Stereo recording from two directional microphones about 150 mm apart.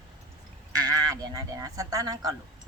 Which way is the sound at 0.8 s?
25° right (ahead or behind).